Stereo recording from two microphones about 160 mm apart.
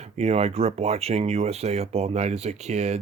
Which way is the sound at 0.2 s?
40° right (ahead or behind).